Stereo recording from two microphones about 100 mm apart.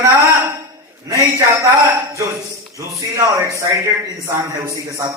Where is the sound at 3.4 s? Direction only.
30° right (ahead or behind).